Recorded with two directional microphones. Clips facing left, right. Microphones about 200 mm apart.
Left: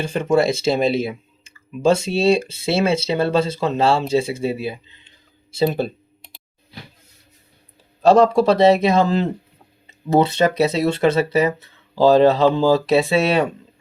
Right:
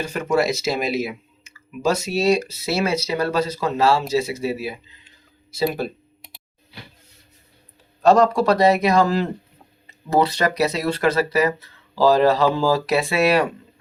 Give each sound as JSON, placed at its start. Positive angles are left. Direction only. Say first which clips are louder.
{"t": 0.0, "sound": "speech", "louder": "left 3 dB", "side_deg": 25}
{"t": 8.0, "sound": "speech", "louder": "left 2 dB", "side_deg": 30}
{"t": 10.1, "sound": "speech", "louder": "left 3 dB", "side_deg": 25}